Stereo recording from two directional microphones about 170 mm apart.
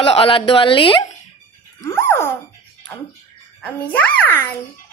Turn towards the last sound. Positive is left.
turn(degrees=10)  # may be behind; listen again after turning